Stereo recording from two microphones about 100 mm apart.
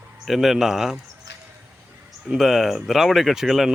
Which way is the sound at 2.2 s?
5° right (ahead or behind).